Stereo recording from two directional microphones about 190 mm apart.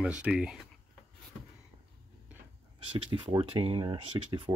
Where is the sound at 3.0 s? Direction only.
30° right (ahead or behind).